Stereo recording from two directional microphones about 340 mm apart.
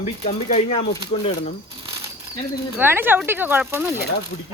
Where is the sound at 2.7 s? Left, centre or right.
Centre.